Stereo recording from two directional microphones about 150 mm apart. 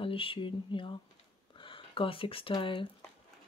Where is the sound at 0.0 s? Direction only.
35° left (ahead or behind).